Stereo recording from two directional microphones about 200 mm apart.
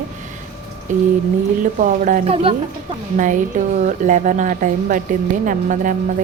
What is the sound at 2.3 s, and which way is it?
Speech, 25° right (ahead or behind).